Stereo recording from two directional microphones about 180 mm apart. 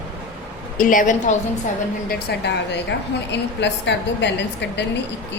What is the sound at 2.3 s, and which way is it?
Speech, 65° left (ahead or behind).